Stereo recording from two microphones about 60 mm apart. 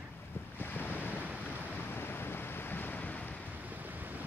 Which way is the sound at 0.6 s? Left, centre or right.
Left.